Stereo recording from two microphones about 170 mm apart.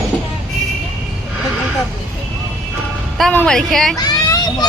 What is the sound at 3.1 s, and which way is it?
Speech, 5° left (ahead or behind).